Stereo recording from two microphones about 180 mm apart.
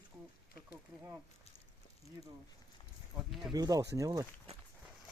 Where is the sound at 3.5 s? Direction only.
20° right (ahead or behind).